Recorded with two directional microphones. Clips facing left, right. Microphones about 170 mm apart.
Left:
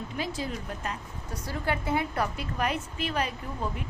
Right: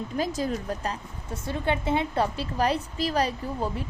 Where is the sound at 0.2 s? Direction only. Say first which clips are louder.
Right 6 dB; 40° right (ahead or behind).